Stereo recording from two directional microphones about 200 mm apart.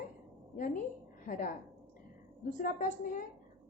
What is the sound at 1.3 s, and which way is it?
A woman's voice, 40° left (ahead or behind).